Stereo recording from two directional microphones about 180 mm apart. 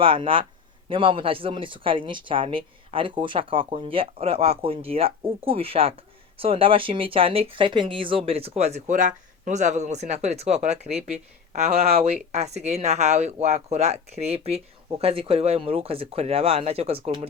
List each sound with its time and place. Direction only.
0.0 s speech: 30° right (ahead or behind)